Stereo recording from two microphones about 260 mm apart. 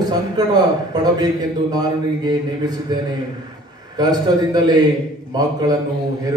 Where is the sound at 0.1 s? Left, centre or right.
Centre.